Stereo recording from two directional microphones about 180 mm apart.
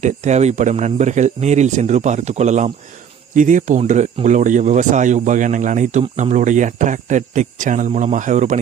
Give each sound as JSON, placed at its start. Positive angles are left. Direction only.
{"t": 0.0, "sound": "speech", "side_deg": -40}